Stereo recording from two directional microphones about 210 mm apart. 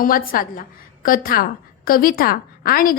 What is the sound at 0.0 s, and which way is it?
A woman's voice, 40° left (ahead or behind).